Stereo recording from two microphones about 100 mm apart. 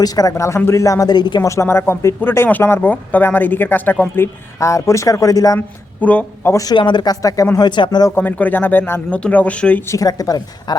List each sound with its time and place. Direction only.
0.0 s speech: 35° left (ahead or behind)
1.4 s speech: 30° left (ahead or behind)
5.5 s speech: 15° left (ahead or behind)
6.5 s speech: 35° left (ahead or behind)
6.7 s speech: 50° left (ahead or behind)
8.1 s speech: 20° left (ahead or behind)
9.8 s speech: 35° left (ahead or behind)